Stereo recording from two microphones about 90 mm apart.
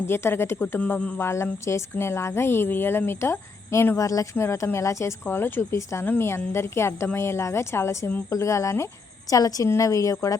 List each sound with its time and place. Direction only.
0.1 s speech: 25° left (ahead or behind)
1.2 s speech: 30° left (ahead or behind)
4.4 s speech: 30° left (ahead or behind)